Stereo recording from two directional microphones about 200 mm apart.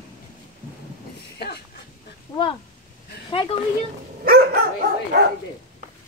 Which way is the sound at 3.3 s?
25° left (ahead or behind).